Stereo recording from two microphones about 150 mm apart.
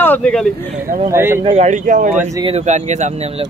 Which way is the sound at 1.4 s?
45° right (ahead or behind).